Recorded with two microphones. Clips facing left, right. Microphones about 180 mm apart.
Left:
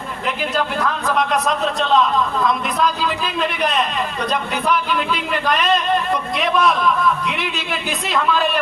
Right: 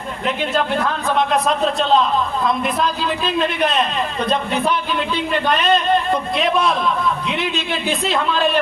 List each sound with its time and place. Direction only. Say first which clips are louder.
0.5 s a man's voice: right 1 dB; 30° right (ahead or behind)